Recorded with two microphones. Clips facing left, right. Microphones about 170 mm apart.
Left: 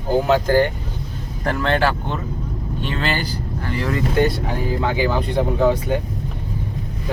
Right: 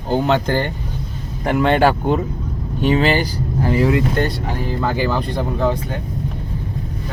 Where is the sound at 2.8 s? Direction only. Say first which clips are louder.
Right 8 dB; 10° right (ahead or behind).